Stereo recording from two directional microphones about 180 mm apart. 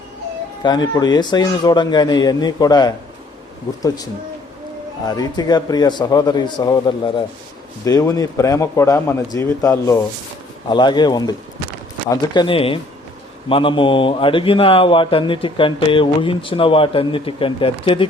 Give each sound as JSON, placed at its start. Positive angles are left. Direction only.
{"t": 0.6, "sound": "a man's voice", "side_deg": 25}
{"t": 5.0, "sound": "a man's voice", "side_deg": 20}